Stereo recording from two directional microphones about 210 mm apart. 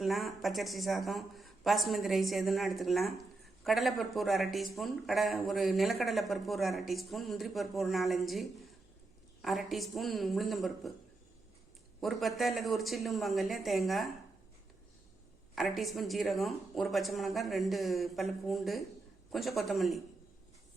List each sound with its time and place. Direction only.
0.0 s speech: centre (ahead or behind)
11.9 s speech: centre (ahead or behind)
15.5 s speech: centre (ahead or behind)